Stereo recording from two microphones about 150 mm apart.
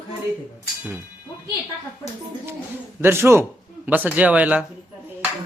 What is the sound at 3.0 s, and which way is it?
A man's voice, 15° right (ahead or behind).